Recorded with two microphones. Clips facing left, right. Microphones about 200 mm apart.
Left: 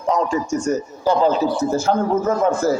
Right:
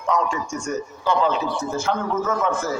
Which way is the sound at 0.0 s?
35° left (ahead or behind).